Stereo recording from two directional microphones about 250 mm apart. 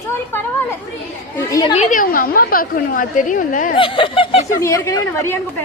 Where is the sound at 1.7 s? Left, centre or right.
Left.